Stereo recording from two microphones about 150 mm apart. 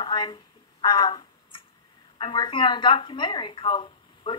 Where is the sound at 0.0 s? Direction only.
30° left (ahead or behind).